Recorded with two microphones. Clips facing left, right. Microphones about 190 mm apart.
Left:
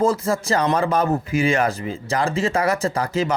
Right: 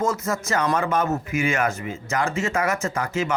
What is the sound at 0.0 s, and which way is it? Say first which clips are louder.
Speech: left 5 dB; 30° left (ahead or behind).